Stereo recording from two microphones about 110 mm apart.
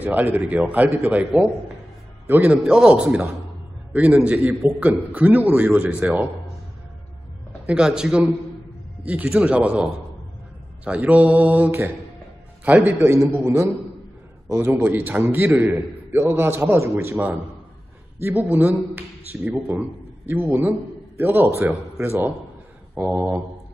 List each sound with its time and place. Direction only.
0.0 s a man's voice: 15° right (ahead or behind)
7.6 s a man's voice: 10° right (ahead or behind)
14.7 s a man's voice: 15° right (ahead or behind)
22.9 s a man's voice: 10° right (ahead or behind)